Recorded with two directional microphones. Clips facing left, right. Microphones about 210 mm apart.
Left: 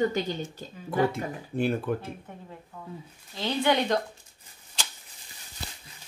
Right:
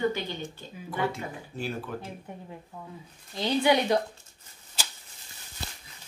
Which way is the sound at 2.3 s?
15° right (ahead or behind).